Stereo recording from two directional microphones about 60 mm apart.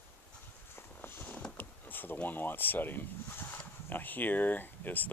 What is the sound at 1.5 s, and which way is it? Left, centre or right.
Speech, left.